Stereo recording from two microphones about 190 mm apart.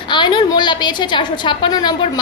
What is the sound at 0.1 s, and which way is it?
A woman's voice, 25° left (ahead or behind).